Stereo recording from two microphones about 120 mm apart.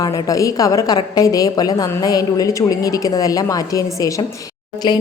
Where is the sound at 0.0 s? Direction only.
30° left (ahead or behind).